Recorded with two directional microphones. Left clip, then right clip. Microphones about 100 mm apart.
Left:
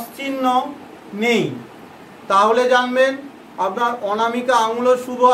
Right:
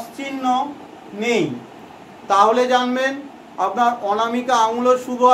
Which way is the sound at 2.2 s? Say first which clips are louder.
Even; 25° right (ahead or behind).